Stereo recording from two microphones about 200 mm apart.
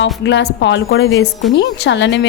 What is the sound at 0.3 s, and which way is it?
A woman's voice, 65° left (ahead or behind).